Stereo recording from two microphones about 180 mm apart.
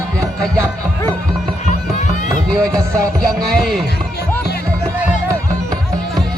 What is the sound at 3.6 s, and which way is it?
Speech, centre (ahead or behind).